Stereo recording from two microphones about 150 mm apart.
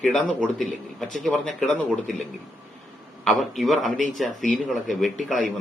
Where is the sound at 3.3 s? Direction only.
Centre (ahead or behind).